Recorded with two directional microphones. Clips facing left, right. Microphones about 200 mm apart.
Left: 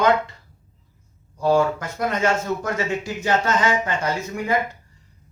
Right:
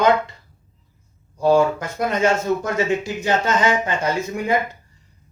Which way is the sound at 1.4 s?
15° right (ahead or behind).